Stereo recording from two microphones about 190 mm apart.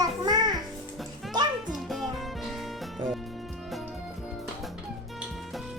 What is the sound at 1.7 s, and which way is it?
Music, centre (ahead or behind).